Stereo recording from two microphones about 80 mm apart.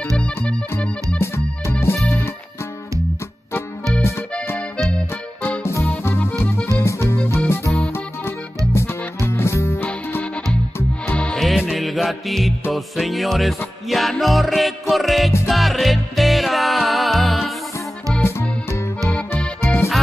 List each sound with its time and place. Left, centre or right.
0.5 s organ: centre
1.1 s music: left
5.6 s music: left
11.1 s music: centre
11.4 s music: centre
19.0 s accordion: centre
19.6 s music: left